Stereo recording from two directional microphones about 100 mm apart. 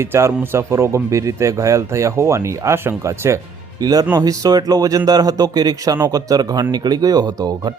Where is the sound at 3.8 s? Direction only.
40° right (ahead or behind).